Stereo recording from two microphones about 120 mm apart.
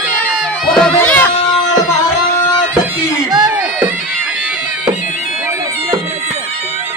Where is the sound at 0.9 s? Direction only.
15° left (ahead or behind).